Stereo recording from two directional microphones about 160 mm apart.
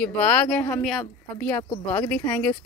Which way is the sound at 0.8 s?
Centre (ahead or behind).